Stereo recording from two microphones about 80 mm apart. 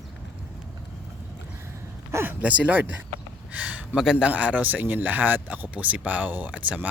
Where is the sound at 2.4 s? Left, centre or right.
Centre.